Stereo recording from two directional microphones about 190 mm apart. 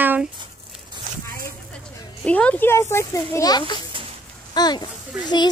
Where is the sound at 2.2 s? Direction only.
5° left (ahead or behind).